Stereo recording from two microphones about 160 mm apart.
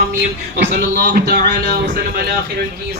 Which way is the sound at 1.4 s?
90° right.